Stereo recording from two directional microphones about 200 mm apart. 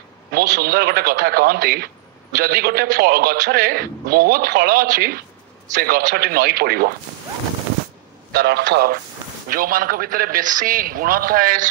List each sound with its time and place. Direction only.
0.3 s a man's voice: 50° right (ahead or behind)
8.3 s a man's voice: 50° right (ahead or behind)